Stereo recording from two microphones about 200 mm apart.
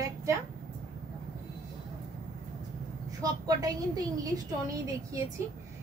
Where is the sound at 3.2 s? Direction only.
15° right (ahead or behind).